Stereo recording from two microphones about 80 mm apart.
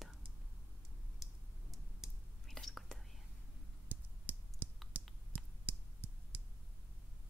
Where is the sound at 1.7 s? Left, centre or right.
Centre.